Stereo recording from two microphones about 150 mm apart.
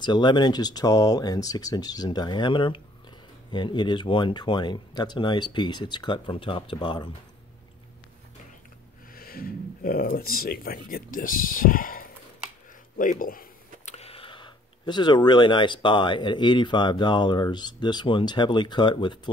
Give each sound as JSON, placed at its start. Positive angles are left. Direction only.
{"t": 0.0, "sound": "speech", "side_deg": 30}
{"t": 9.1, "sound": "speech", "side_deg": 80}
{"t": 12.9, "sound": "a sound", "side_deg": 65}
{"t": 13.9, "sound": "speech", "side_deg": 40}